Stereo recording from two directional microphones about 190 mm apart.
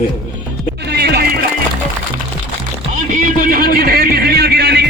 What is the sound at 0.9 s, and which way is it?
Music, 60° right (ahead or behind).